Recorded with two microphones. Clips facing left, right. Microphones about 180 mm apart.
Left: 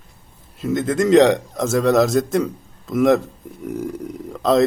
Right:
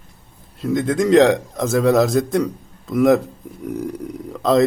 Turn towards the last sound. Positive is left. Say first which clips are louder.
# even
turn(degrees=0)  # may be behind; listen again after turning